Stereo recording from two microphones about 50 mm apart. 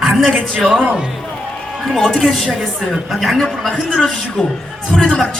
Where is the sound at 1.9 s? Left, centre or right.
Centre.